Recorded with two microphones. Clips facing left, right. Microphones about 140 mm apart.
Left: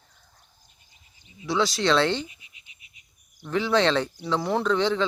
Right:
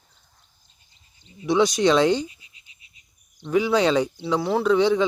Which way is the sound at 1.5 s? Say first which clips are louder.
Right 5 dB; 20° right (ahead or behind).